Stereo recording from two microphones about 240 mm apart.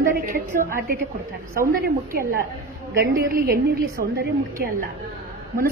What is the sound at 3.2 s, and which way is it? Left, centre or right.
A woman's voice, right.